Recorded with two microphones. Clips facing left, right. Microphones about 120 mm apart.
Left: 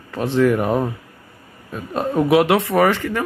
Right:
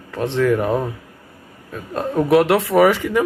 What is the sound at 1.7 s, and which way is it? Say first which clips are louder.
Speech: left 1 dB; 5° left (ahead or behind).